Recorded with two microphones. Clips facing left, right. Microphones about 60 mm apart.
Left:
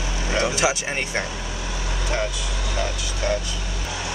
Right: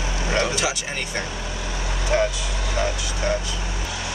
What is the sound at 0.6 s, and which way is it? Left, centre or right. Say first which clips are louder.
Speech: left 3 dB; left.